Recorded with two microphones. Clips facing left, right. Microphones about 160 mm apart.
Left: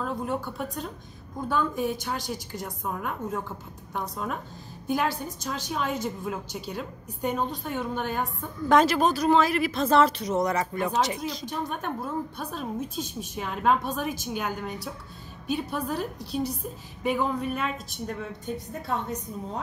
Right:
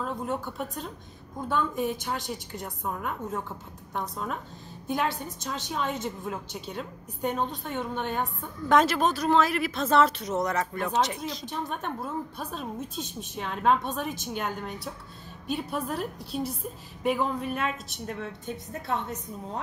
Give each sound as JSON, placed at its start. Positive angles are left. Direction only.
{"t": 0.0, "sound": "a woman's voice", "side_deg": 0}